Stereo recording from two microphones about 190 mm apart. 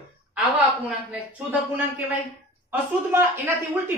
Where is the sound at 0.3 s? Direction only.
5° right (ahead or behind).